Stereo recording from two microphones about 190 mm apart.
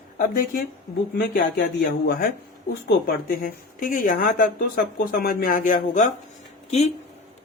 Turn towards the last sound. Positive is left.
turn(degrees=35)  # may be behind; listen again after turning